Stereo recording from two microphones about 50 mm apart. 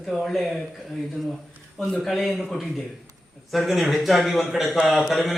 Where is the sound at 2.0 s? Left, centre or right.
Centre.